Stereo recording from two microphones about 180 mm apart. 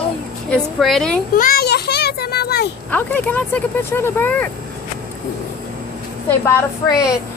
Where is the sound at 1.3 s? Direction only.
55° left (ahead or behind).